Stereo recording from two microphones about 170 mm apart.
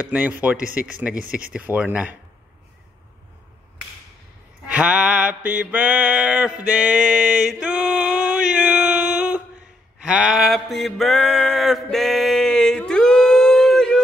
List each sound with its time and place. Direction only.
0.0 s speech: 10° right (ahead or behind)
1.2 s speech: 55° right (ahead or behind)
1.5 s speech: 10° right (ahead or behind)
4.6 s mantra: 5° right (ahead or behind)
10.0 s a sound: 5° right (ahead or behind)